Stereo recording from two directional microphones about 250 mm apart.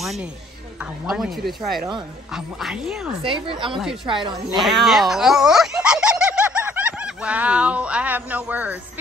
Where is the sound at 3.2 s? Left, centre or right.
Right.